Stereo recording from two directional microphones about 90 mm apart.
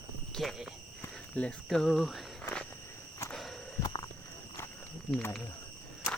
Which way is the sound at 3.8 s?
50° left (ahead or behind).